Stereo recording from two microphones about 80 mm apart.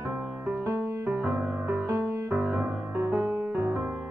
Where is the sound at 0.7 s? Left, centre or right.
Right.